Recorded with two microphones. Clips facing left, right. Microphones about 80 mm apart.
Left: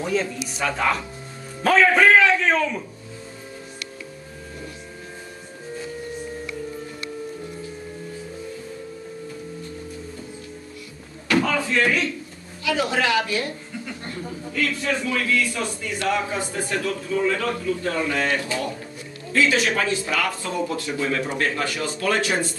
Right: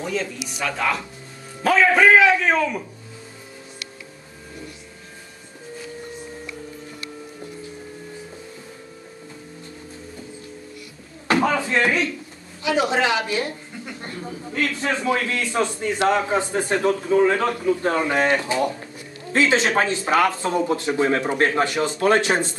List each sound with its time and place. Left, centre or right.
0.7 s speech: centre
1.6 s a man's voice: centre
11.2 s a sound: right
12.6 s a woman's voice: right